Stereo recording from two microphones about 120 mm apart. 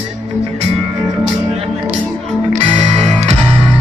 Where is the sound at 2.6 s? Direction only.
55° right (ahead or behind).